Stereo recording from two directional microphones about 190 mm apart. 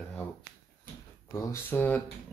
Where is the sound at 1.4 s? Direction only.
15° left (ahead or behind).